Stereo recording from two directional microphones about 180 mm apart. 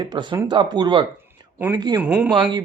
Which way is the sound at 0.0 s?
25° right (ahead or behind).